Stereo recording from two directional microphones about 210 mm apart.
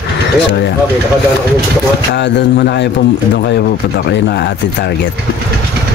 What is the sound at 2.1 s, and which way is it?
Speech, 55° left (ahead or behind).